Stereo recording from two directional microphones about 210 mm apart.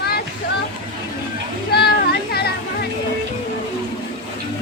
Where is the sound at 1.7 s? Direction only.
50° left (ahead or behind).